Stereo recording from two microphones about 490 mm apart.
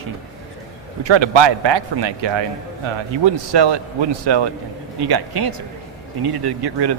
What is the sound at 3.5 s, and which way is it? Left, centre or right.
Speech, right.